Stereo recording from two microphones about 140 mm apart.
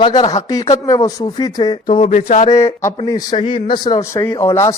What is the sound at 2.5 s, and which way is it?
A man's voice, 20° left (ahead or behind).